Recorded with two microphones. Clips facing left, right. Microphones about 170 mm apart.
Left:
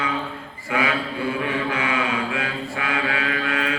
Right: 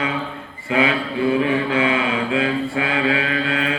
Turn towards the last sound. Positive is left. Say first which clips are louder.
# right 3 dB
turn(degrees=-30)  # may be behind; listen again after turning